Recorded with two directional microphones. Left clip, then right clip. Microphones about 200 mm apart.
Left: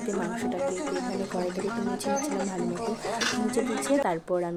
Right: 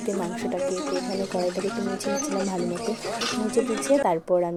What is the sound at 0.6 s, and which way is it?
Speech, 40° right (ahead or behind).